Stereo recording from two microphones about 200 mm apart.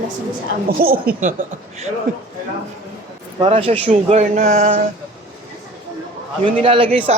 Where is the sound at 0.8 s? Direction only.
50° right (ahead or behind).